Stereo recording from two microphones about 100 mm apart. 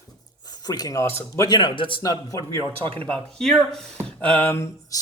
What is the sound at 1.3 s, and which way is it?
Speech, 40° left (ahead or behind).